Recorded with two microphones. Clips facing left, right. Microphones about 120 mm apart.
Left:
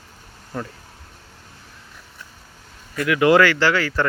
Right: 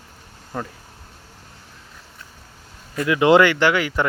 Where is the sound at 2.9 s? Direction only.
25° right (ahead or behind).